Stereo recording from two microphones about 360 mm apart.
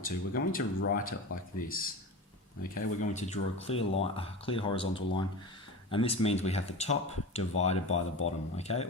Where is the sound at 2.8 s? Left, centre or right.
Centre.